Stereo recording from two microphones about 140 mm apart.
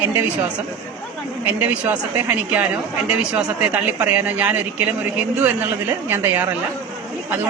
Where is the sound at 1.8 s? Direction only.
10° right (ahead or behind).